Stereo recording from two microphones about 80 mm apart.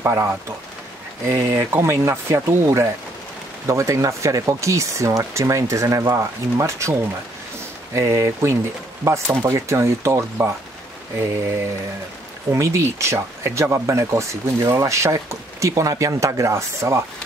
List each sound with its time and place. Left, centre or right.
0.0 s speech: right